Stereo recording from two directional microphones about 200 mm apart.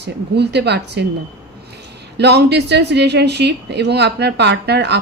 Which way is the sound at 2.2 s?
55° right (ahead or behind).